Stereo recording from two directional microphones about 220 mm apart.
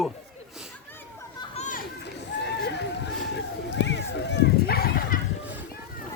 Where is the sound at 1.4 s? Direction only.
30° left (ahead or behind).